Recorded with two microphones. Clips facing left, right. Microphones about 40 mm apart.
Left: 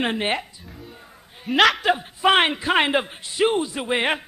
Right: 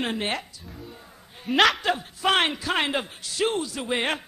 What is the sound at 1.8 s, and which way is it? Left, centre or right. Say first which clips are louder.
A man's voice: left 5 dB; centre.